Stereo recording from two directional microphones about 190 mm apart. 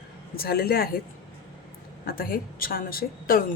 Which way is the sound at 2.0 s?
50° left (ahead or behind).